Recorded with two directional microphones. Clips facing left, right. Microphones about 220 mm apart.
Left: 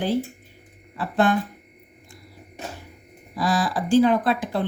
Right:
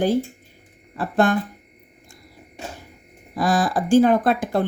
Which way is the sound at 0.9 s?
45° right (ahead or behind).